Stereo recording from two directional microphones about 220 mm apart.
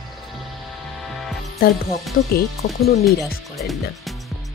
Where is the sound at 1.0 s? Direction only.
Centre (ahead or behind).